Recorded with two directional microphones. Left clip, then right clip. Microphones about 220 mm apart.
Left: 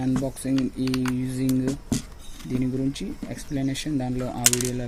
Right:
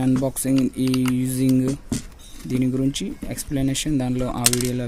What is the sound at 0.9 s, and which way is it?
Speech, 5° right (ahead or behind).